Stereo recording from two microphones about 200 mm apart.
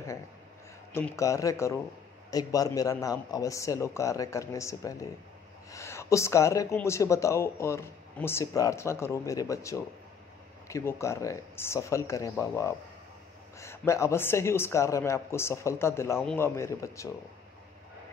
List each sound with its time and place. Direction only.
0.9 s speech: 15° left (ahead or behind)